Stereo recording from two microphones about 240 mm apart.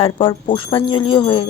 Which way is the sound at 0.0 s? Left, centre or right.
Left.